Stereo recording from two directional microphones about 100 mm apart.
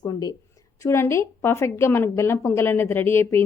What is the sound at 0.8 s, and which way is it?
A woman's voice, 25° left (ahead or behind).